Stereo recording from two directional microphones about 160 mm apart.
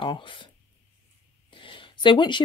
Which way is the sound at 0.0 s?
30° left (ahead or behind).